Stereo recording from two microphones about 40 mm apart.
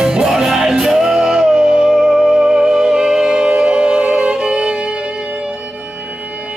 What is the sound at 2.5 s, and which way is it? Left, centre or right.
Music, right.